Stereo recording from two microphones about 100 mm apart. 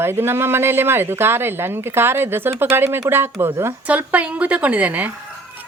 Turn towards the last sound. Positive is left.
turn(degrees=-15)  # may be behind; listen again after turning